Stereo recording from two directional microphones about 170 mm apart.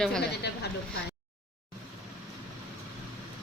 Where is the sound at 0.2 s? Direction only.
75° left (ahead or behind).